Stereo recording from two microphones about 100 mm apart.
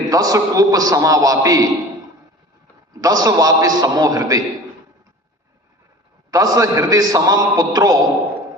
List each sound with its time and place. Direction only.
0.1 s a man's voice: 35° right (ahead or behind)
3.0 s a man's voice: 40° right (ahead or behind)
6.3 s a man's voice: 35° right (ahead or behind)